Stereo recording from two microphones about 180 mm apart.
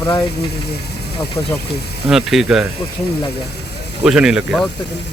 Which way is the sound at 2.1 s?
Centre (ahead or behind).